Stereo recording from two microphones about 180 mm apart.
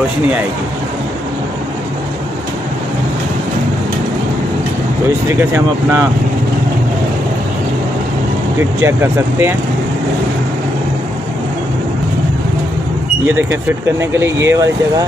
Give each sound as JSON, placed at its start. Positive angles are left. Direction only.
{"t": 5.3, "sound": "speech", "side_deg": -10}
{"t": 8.8, "sound": "speech", "side_deg": -15}
{"t": 13.5, "sound": "speech", "side_deg": -15}